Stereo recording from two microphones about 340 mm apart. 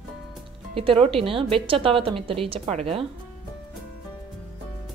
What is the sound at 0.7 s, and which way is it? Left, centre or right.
Speech, centre.